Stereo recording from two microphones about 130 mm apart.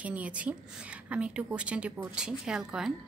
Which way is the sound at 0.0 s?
10° right (ahead or behind).